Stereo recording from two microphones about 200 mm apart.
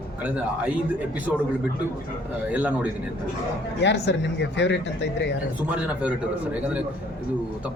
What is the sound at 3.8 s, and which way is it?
Speech, 60° left (ahead or behind).